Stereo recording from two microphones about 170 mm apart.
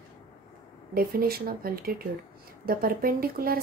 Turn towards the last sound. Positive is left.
turn(degrees=-60)  # may be behind; listen again after turning